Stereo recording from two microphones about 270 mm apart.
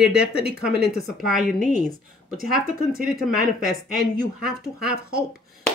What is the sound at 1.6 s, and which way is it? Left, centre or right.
Speech, right.